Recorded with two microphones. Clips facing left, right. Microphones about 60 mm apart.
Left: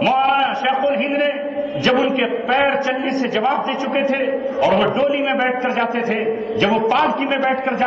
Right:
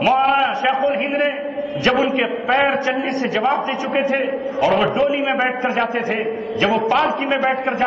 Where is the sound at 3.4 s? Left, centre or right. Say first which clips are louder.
Even; centre.